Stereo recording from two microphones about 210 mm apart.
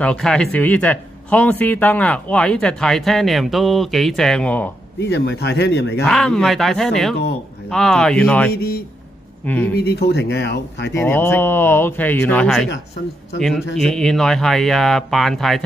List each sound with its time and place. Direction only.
0.0 s speech: 5° left (ahead or behind)
5.0 s speech: 55° left (ahead or behind)
6.0 s speech: centre (ahead or behind)
8.5 s speech: 50° left (ahead or behind)
9.4 s speech: 10° left (ahead or behind)
9.8 s speech: 50° left (ahead or behind)
10.9 s speech: 10° left (ahead or behind)